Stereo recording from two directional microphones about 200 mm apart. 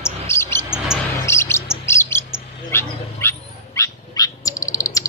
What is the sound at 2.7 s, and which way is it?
Dog, 10° left (ahead or behind).